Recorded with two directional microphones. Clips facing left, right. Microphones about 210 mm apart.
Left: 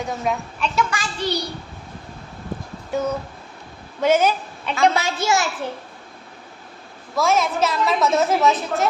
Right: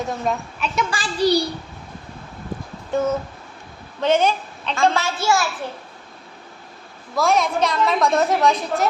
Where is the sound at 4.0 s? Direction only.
10° left (ahead or behind).